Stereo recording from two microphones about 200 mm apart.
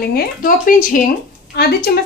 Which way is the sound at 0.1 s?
45° left (ahead or behind).